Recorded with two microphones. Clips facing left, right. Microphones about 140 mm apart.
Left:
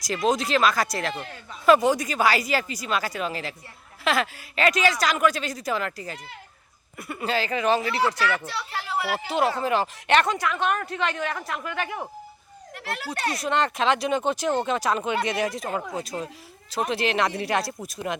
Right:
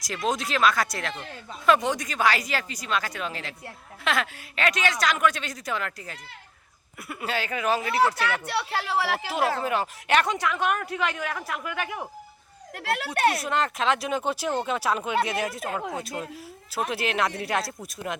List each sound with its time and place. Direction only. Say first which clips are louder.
0.0 s speech: left 4 dB; centre (ahead or behind)
8.4 s speech: right 4 dB; 70° right (ahead or behind); by 9.1 s 90° right
9.6 s speech: left 3 dB; centre (ahead or behind)
12.8 s speech: right 6 dB; 65° right (ahead or behind)
13.4 s speech: left 2 dB; 5° right (ahead or behind)